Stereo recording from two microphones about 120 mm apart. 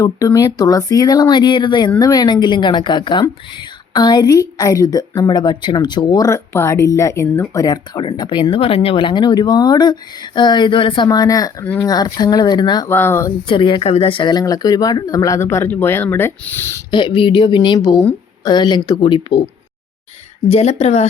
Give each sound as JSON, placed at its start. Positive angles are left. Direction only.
{"t": 0.0, "sound": "speech", "side_deg": 30}
{"t": 12.9, "sound": "speech", "side_deg": 20}
{"t": 13.5, "sound": "speech", "side_deg": 45}
{"t": 16.9, "sound": "speech", "side_deg": 45}
{"t": 17.7, "sound": "speech", "side_deg": 30}
{"t": 20.5, "sound": "a woman's voice", "side_deg": 60}